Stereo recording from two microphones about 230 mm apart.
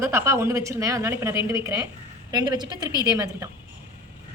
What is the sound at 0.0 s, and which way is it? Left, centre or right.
A woman's voice, centre.